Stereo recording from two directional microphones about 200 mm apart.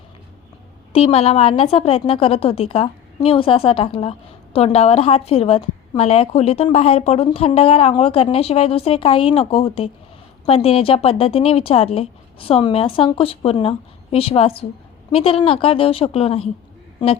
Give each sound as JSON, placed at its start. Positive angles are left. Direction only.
{"t": 0.9, "sound": "a woman's voice", "side_deg": 30}